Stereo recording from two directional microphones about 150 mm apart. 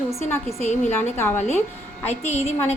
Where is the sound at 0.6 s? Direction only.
50° left (ahead or behind).